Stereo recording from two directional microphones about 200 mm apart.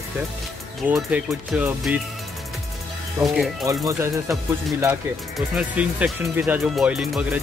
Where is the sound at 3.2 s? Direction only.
Centre (ahead or behind).